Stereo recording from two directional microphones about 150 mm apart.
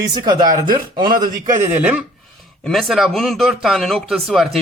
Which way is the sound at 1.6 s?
10° right (ahead or behind).